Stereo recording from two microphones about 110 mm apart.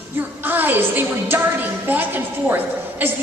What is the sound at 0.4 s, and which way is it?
A woman's voice, 15° right (ahead or behind).